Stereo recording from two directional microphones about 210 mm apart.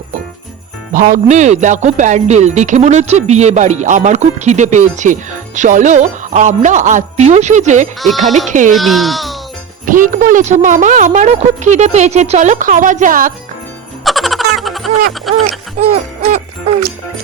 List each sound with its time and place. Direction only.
0.9 s speech: 40° right (ahead or behind)
8.0 s a child's voice: centre (ahead or behind)
8.4 s speech: 35° right (ahead or behind)
8.7 s a child's voice: centre (ahead or behind)
9.8 s speech: 40° right (ahead or behind)
14.0 s music: centre (ahead or behind)
15.3 s a child's voice: centre (ahead or behind)
15.8 s speech: 35° right (ahead or behind)